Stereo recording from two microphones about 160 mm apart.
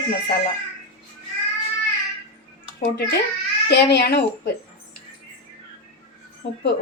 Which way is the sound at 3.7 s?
90° left.